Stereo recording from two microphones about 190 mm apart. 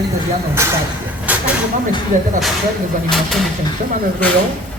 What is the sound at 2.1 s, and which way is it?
Speech, 40° right (ahead or behind).